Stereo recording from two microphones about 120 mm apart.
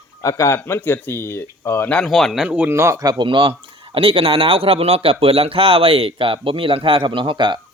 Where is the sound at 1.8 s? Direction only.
10° left (ahead or behind).